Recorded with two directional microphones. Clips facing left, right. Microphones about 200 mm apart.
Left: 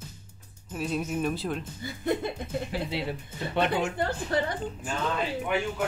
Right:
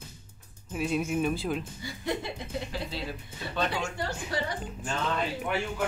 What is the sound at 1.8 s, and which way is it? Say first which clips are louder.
Speech: left 7 dB; 55° left (ahead or behind).